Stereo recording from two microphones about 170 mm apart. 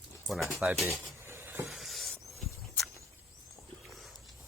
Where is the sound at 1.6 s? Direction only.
Centre (ahead or behind).